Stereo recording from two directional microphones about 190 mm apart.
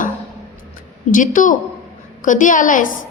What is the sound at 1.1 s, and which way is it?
A woman's voice, 45° left (ahead or behind).